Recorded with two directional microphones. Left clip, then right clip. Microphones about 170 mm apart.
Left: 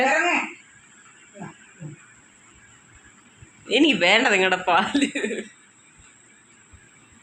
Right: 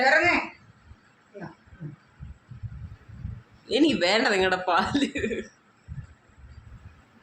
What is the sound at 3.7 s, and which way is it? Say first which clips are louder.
Speech: left 5 dB; 15° left (ahead or behind).